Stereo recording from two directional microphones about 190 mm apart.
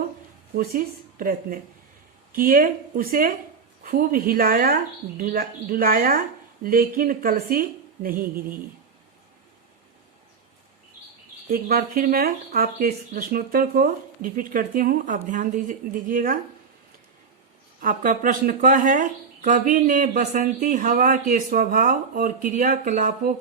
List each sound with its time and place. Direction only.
0.5 s speech: 50° right (ahead or behind)
11.5 s speech: 50° right (ahead or behind)
17.7 s speech: 45° right (ahead or behind)